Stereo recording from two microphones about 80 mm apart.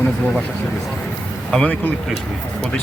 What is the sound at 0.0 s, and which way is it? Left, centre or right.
Speech, centre.